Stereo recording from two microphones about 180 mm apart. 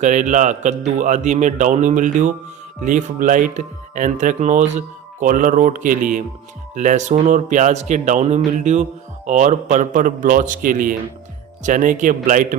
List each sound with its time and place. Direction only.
0.0 s a man's voice: 40° right (ahead or behind)